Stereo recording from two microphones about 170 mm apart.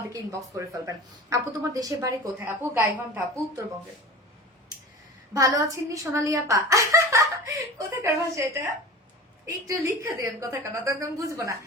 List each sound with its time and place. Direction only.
0.1 s a woman's voice: 20° right (ahead or behind)
5.3 s a woman's voice: 20° right (ahead or behind)
9.6 s a woman's voice: 15° right (ahead or behind)